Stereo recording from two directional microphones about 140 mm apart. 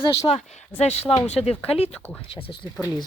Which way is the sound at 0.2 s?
50° left (ahead or behind).